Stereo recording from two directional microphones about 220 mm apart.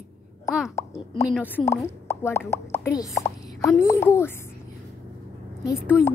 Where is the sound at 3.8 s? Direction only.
10° left (ahead or behind).